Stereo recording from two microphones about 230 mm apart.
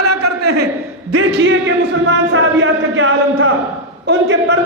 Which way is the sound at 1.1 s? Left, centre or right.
Right.